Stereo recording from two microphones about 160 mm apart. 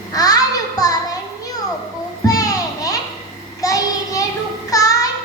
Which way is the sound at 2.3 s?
20° left (ahead or behind).